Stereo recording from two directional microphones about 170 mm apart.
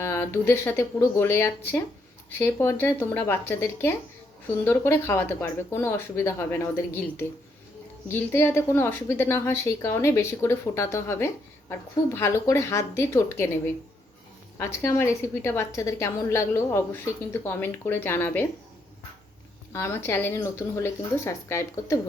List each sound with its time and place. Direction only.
0.0 s a woman's voice: 15° left (ahead or behind)
8.1 s a woman's voice: 15° left (ahead or behind)
14.6 s a woman's voice: 15° left (ahead or behind)
19.7 s a woman's voice: 15° left (ahead or behind)